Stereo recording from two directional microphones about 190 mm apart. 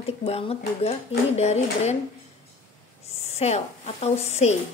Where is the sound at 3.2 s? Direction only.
35° left (ahead or behind).